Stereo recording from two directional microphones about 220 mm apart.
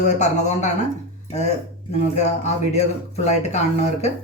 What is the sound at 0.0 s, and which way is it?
Speech, 30° left (ahead or behind).